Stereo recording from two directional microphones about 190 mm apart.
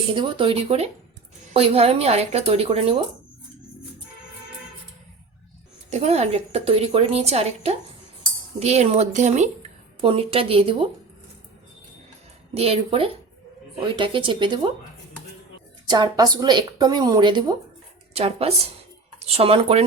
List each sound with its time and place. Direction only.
0.1 s a woman's voice: 25° right (ahead or behind)
5.9 s a woman's voice: 35° right (ahead or behind)
12.5 s a woman's voice: 30° right (ahead or behind)
15.9 s a woman's voice: 20° right (ahead or behind)